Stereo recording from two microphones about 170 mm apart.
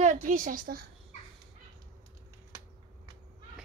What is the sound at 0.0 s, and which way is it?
Speech, 45° right (ahead or behind).